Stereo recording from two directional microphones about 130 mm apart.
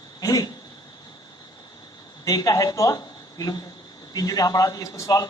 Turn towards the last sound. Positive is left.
turn(degrees=25)  # may be behind; listen again after turning